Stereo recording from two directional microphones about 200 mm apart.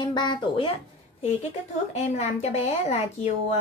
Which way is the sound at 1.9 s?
35° left (ahead or behind).